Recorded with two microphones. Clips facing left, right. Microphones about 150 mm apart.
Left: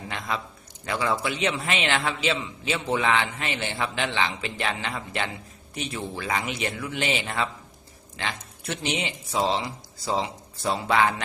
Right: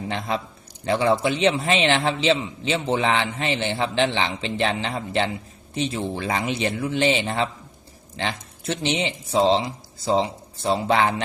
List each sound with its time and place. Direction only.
0.1 s a man's voice: 30° right (ahead or behind)